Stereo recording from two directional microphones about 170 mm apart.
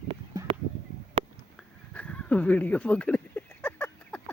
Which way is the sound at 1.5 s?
5° left (ahead or behind).